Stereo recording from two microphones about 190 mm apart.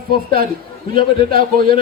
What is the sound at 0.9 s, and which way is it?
Speech, 50° right (ahead or behind).